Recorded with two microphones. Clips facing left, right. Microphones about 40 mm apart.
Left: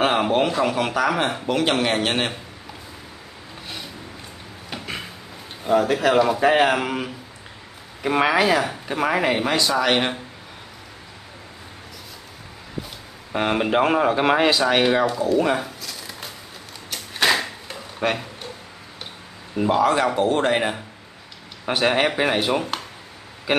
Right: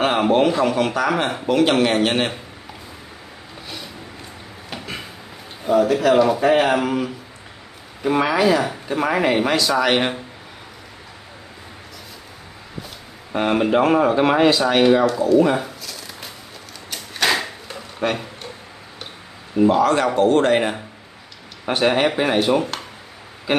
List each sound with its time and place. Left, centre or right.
0.0 s a sound: centre
0.6 s speech: centre
5.7 s speech: centre
8.0 s speech: left
8.6 s speech: centre
13.3 s speech: centre
15.6 s a sound: centre
19.5 s speech: centre